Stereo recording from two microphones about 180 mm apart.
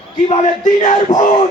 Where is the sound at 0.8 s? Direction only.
35° left (ahead or behind).